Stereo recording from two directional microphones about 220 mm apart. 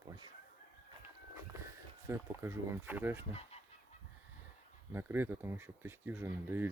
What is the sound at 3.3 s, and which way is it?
Goose, 30° left (ahead or behind).